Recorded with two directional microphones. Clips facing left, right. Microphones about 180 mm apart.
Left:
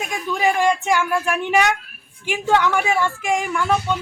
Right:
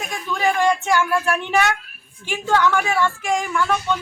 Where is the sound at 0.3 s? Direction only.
15° left (ahead or behind).